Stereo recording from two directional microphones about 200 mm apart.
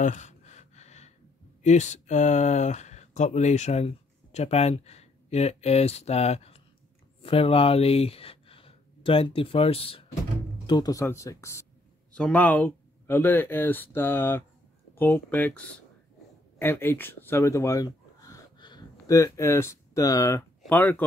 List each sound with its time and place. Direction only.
0.0 s gasp: 35° left (ahead or behind)
1.6 s speech: 35° left (ahead or behind)
10.7 s speech: 20° left (ahead or behind)